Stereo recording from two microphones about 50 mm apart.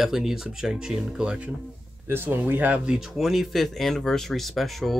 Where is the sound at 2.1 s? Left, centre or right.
Right.